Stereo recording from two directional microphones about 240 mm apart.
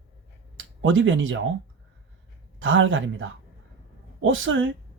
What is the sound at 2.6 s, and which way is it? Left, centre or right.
Speech, right.